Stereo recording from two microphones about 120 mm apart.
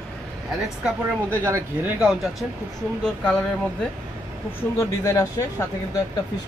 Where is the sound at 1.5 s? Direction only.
25° right (ahead or behind).